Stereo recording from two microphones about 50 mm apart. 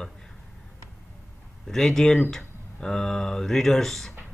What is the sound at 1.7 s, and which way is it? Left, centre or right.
Speech, centre.